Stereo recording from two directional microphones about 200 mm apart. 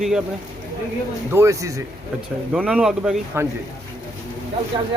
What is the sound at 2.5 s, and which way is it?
Speech, 5° right (ahead or behind).